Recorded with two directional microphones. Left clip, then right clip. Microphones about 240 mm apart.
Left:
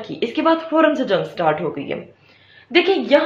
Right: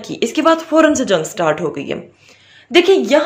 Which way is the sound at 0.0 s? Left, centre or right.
Right.